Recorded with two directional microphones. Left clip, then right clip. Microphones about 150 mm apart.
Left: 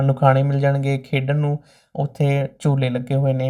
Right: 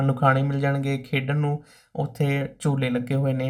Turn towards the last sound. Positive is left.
turn(degrees=20)  # may be behind; listen again after turning